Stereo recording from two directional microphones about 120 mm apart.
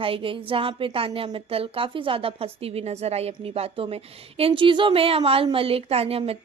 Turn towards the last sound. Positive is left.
turn(degrees=-55)  # may be behind; listen again after turning